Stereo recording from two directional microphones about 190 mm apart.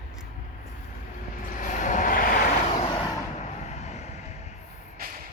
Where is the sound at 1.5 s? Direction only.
40° left (ahead or behind).